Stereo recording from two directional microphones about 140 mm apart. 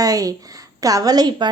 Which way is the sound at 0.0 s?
25° right (ahead or behind).